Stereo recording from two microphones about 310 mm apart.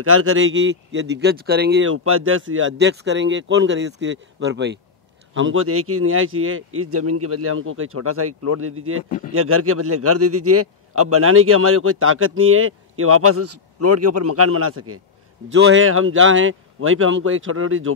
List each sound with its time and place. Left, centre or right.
0.0 s a man's voice: right